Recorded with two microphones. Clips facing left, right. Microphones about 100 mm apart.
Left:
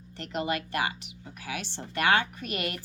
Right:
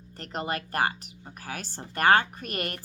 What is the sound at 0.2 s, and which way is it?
A woman's voice, 40° right (ahead or behind).